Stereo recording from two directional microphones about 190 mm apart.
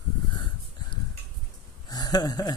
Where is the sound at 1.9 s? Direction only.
20° left (ahead or behind).